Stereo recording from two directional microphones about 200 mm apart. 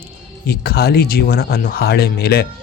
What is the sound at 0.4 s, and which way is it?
Speech, 50° left (ahead or behind).